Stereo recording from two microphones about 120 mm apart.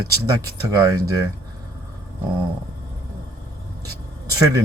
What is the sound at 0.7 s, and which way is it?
Speech, 25° right (ahead or behind).